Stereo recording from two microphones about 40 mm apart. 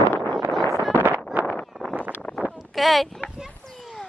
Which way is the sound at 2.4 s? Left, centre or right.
Centre.